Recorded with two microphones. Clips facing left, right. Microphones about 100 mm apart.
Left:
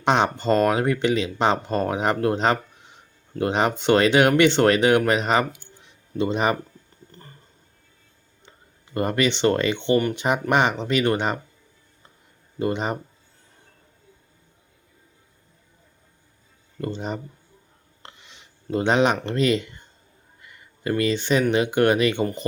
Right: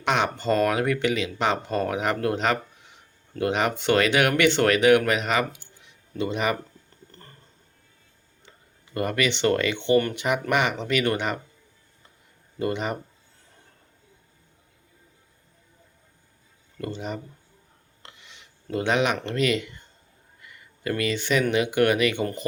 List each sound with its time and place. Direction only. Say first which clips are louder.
0.0 s speech: left 4 dB; 30° left (ahead or behind)
5.8 s a sound: left 4 dB; 30° left (ahead or behind)
8.9 s speech: left 3 dB; 30° left (ahead or behind)
12.5 s speech: left 2 dB; 25° left (ahead or behind)
16.8 s speech: left 3 dB; 30° left (ahead or behind)
18.0 s a sound: left 2 dB; 25° left (ahead or behind)
21.5 s speech: left 1 dB; 30° left (ahead or behind)